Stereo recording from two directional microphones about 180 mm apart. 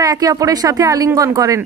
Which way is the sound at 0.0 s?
20° right (ahead or behind).